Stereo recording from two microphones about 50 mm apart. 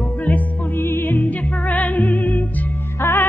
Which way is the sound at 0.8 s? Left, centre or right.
Left.